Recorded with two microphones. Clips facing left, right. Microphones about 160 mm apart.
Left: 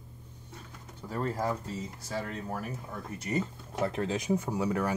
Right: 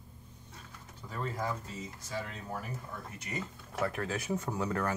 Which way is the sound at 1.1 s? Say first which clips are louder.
Left 5 dB; 40° left (ahead or behind).